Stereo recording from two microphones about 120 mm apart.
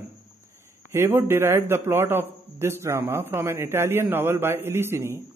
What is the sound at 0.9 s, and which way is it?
A man's voice, 20° right (ahead or behind).